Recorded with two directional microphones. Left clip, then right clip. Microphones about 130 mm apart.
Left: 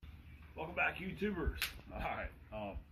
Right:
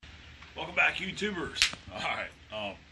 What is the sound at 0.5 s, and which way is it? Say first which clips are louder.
A man's voice: right 9 dB; 15° right (ahead or behind).